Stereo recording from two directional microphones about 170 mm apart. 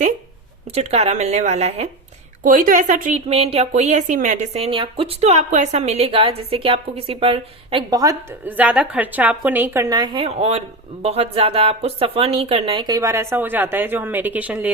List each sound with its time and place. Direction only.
0.7 s a woman's voice: 40° right (ahead or behind)
2.4 s a woman's voice: 55° right (ahead or behind); by 14.7 s 10° right (ahead or behind)